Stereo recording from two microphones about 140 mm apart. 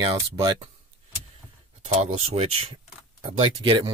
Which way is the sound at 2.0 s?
50° right (ahead or behind).